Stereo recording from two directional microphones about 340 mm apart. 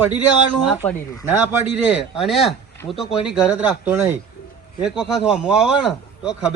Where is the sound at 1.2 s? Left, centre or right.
Centre.